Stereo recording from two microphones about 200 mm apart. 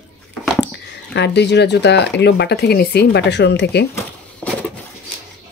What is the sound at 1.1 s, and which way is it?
Speech, 60° left (ahead or behind).